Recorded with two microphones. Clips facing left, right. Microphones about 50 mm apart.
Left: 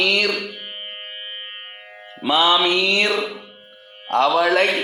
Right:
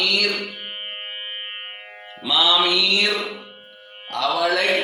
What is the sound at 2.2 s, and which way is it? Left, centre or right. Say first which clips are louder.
Speech: left 3 dB; left.